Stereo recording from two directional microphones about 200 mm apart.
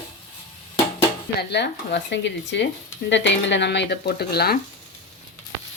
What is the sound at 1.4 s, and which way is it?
Speech, 60° left (ahead or behind).